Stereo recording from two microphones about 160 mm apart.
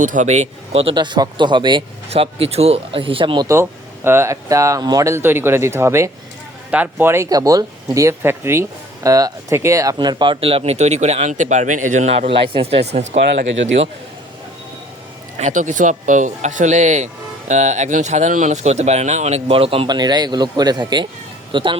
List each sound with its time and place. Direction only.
0.0 s speech: 55° right (ahead or behind); by 3.4 s 35° right (ahead or behind)
3.5 s speech: 15° right (ahead or behind); by 13.1 s 45° right (ahead or behind)
15.4 s speech: 50° right (ahead or behind); by 21.8 s 30° right (ahead or behind)